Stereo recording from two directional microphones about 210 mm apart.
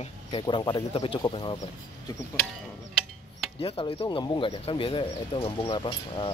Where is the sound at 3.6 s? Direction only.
25° left (ahead or behind).